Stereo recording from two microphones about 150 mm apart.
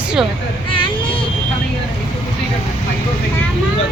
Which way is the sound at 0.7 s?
35° left (ahead or behind).